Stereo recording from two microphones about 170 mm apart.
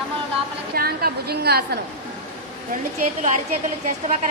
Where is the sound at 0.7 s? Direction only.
65° right (ahead or behind).